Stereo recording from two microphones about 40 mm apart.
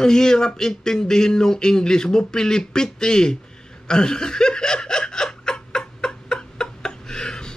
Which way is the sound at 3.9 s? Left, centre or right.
Centre.